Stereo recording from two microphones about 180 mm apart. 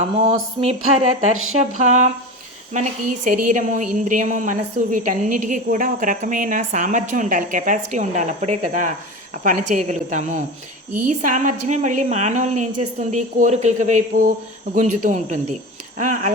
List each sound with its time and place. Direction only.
0.6 s a woman's voice: 35° right (ahead or behind)